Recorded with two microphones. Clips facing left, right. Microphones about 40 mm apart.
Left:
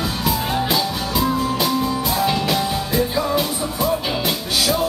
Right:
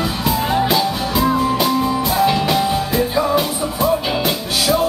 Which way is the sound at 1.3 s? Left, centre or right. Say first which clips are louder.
Right 4 dB; centre.